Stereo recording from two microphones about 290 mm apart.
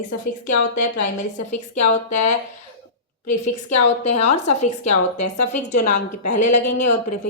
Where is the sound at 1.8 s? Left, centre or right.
Left.